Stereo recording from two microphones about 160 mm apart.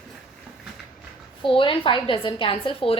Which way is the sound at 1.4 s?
30° left (ahead or behind).